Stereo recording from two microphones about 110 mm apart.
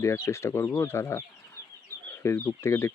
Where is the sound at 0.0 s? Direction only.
25° left (ahead or behind).